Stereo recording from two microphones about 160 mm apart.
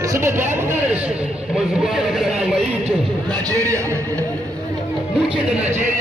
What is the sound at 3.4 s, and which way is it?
Speech, 20° right (ahead or behind).